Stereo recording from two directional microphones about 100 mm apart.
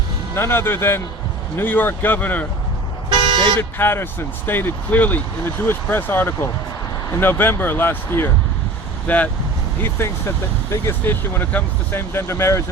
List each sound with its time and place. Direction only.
0.3 s speech: 25° left (ahead or behind)
3.6 s speech: 25° left (ahead or behind)
9.8 s speech: 25° left (ahead or behind)